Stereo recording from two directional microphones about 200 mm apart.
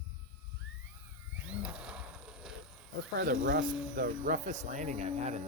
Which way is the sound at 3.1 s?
50° right (ahead or behind).